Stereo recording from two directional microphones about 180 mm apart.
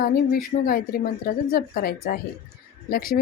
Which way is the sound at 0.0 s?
55° left (ahead or behind).